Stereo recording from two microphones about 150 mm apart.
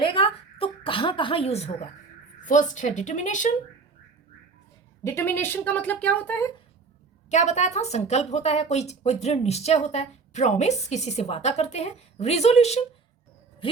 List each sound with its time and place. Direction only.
0.0 s a woman's voice: 35° left (ahead or behind)
2.4 s a woman's voice: 55° left (ahead or behind)
5.0 s a woman's voice: 15° left (ahead or behind)
7.3 s a woman's voice: 50° left (ahead or behind)